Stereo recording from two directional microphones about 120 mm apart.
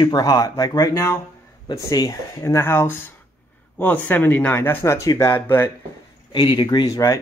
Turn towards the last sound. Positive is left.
turn(degrees=30)  # may be behind; listen again after turning